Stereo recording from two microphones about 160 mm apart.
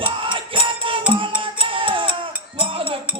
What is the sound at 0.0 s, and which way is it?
Music, 35° right (ahead or behind).